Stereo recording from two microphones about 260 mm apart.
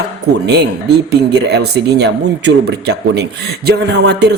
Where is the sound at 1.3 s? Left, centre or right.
Right.